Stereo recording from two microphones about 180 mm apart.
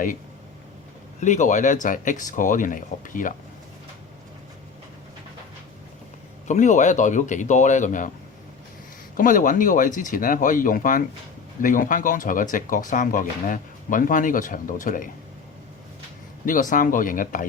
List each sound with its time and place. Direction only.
1.2 s speech: 40° left (ahead or behind)
6.5 s speech: 45° left (ahead or behind)
9.1 s speech: 50° left (ahead or behind)
16.5 s speech: 45° left (ahead or behind)